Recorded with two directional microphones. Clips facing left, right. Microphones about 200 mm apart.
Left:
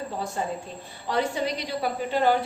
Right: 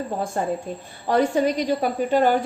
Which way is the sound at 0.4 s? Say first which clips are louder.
Right 5 dB; 50° right (ahead or behind).